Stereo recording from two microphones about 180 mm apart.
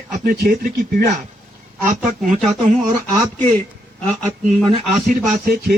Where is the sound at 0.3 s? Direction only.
55° right (ahead or behind).